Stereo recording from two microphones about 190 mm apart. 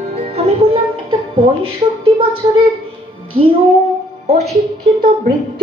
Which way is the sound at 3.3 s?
30° right (ahead or behind).